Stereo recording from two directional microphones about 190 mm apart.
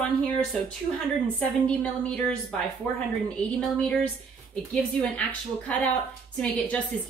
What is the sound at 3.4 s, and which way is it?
Speech, 5° left (ahead or behind).